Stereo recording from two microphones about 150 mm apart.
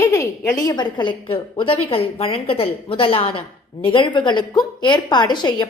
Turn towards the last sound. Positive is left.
turn(degrees=30)  # may be behind; listen again after turning